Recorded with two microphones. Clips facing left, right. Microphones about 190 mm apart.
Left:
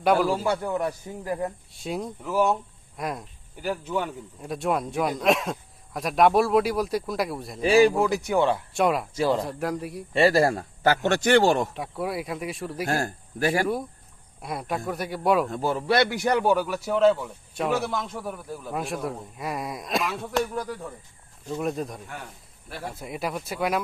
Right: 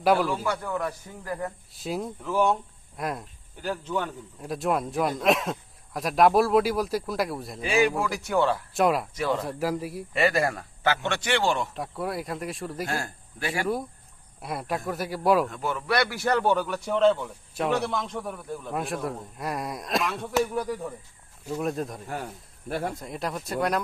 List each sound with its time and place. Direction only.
0.0 s speech: centre (ahead or behind)
0.3 s speech: 25° left (ahead or behind)
1.7 s speech: centre (ahead or behind)
4.4 s speech: centre (ahead or behind)
7.6 s speech: 35° left (ahead or behind); by 8.6 s 20° left (ahead or behind)
8.7 s speech: centre (ahead or behind)
10.1 s a man's voice: 30° left (ahead or behind)
11.7 s speech: centre (ahead or behind)
12.9 s a man's voice: 40° left (ahead or behind)
14.4 s speech: centre (ahead or behind)
15.4 s speech: 35° left (ahead or behind); by 23.8 s 5° left (ahead or behind)